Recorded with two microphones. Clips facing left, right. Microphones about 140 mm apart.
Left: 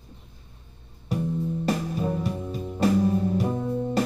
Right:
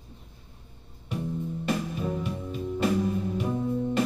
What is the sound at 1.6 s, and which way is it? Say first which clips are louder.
Music: left 1 dB; 40° left (ahead or behind).